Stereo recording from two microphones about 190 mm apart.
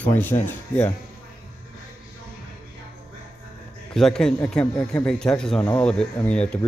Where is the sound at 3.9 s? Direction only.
5° left (ahead or behind).